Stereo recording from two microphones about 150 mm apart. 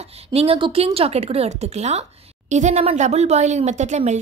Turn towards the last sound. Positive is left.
turn(degrees=-50)  # may be behind; listen again after turning